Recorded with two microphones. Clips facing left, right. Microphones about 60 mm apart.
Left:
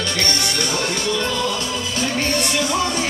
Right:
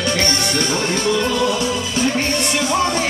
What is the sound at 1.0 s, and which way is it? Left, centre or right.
Music, right.